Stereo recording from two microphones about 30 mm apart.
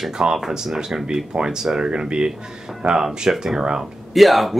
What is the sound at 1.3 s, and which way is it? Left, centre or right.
Speech, right.